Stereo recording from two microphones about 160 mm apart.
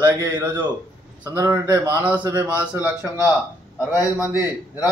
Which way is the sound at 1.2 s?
20° right (ahead or behind).